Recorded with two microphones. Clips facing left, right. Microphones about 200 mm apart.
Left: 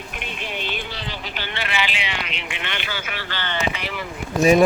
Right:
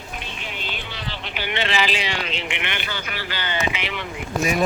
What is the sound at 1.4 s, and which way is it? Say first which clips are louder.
Speech: right 7 dB; 15° right (ahead or behind).